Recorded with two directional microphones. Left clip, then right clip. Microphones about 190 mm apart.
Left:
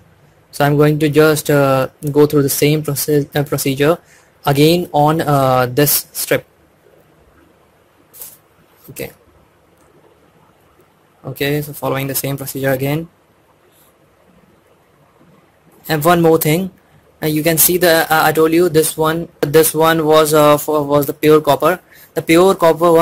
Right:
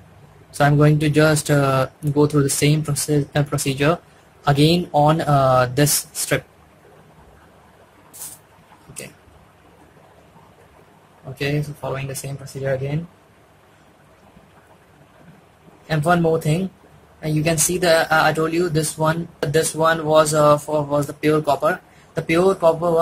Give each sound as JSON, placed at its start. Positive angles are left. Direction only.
{"t": 0.5, "sound": "speech", "side_deg": 30}
{"t": 11.3, "sound": "speech", "side_deg": 40}
{"t": 12.6, "sound": "speech", "side_deg": 55}
{"t": 15.9, "sound": "a man's voice", "side_deg": 45}